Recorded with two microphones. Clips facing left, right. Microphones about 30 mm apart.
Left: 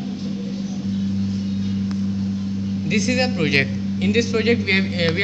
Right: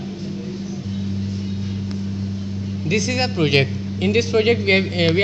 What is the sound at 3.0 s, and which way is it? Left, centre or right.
Speech, right.